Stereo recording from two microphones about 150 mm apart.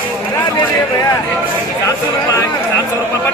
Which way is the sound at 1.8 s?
20° left (ahead or behind).